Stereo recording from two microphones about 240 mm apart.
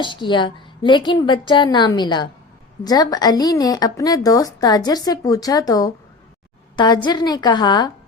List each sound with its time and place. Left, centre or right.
0.0 s a woman's voice: centre